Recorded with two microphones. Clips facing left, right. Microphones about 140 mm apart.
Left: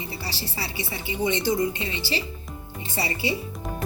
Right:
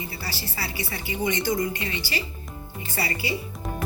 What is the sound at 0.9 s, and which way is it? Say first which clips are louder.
A woman's voice: left 2 dB; 20° left (ahead or behind).